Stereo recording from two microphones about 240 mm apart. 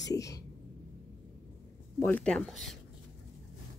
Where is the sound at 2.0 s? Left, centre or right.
Centre.